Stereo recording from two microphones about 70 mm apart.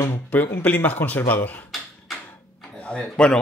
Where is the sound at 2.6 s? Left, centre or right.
Centre.